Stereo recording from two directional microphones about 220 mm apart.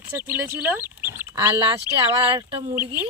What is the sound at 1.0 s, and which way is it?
Rodents, 10° right (ahead or behind).